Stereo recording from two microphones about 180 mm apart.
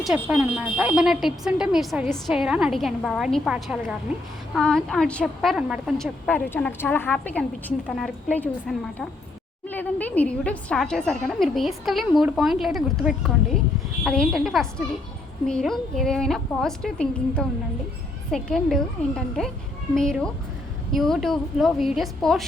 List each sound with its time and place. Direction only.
0.0 s a woman's voice: centre (ahead or behind)